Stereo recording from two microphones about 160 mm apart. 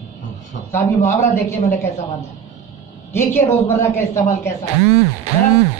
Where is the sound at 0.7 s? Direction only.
15° left (ahead or behind).